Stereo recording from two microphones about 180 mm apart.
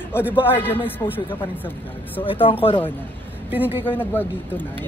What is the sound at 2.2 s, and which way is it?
Speech, 30° left (ahead or behind).